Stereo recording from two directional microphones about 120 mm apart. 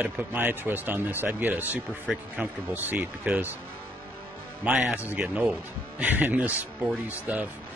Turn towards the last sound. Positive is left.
turn(degrees=-15)  # may be behind; listen again after turning